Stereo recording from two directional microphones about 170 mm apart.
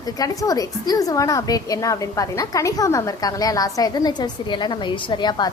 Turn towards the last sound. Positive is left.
turn(degrees=25)  # may be behind; listen again after turning